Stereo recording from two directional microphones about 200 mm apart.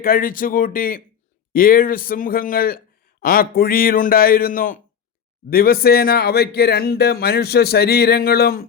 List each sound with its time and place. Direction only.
0.0 s speech: 45° left (ahead or behind)